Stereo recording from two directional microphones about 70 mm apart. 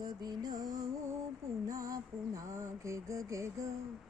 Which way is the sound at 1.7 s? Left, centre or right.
Right.